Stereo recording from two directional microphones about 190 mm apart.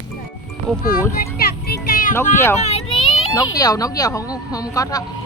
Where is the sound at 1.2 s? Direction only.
55° left (ahead or behind).